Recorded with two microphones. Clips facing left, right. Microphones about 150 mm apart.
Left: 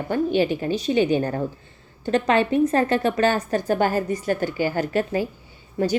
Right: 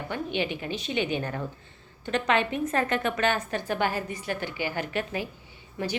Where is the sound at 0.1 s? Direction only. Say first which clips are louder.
Left 10 dB; 40° left (ahead or behind).